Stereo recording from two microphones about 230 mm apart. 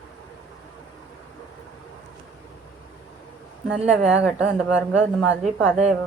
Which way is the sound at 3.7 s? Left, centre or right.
Centre.